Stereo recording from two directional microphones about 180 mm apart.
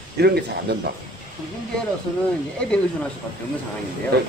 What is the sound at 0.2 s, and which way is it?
Speech, 65° right (ahead or behind).